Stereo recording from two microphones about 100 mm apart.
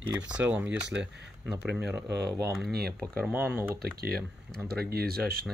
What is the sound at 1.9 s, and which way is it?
Speech, 30° right (ahead or behind).